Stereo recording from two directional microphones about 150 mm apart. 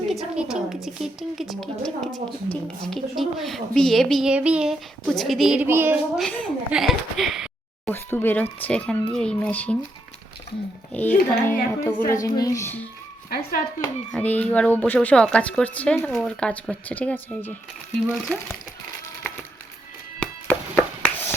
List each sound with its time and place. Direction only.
0.1 s a woman's voice: centre (ahead or behind)
5.6 s a woman's voice: 15° right (ahead or behind)
6.1 s a woman's voice: 5° left (ahead or behind)
7.9 s a woman's voice: 15° left (ahead or behind)
10.9 s a woman's voice: 10° left (ahead or behind)
13.3 s speech: 65° left (ahead or behind)
14.1 s a woman's voice: 10° left (ahead or behind)
20.1 s music: 10° left (ahead or behind)